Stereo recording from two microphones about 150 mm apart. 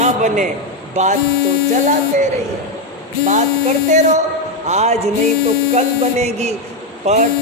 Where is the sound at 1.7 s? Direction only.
55° right (ahead or behind).